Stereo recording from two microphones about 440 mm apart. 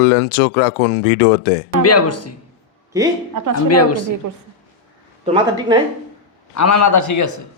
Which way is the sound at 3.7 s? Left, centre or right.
Left.